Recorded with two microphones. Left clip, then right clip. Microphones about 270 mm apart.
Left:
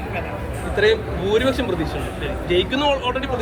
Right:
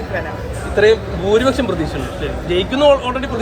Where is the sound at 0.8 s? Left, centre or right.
Right.